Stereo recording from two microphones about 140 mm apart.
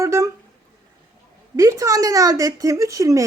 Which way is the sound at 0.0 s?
20° right (ahead or behind).